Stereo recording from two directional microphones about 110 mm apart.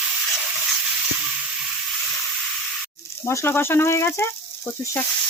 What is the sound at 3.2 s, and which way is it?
Speech, 20° left (ahead or behind).